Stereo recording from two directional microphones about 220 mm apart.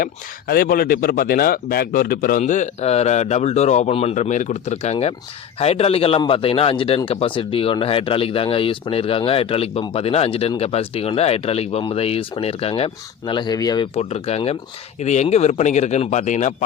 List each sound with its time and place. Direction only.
0.0 s speech: 40° left (ahead or behind)